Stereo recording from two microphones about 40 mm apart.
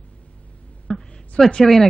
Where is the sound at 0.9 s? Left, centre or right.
Centre.